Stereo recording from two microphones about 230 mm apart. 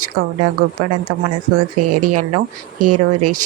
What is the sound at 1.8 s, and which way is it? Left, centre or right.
Speech, right.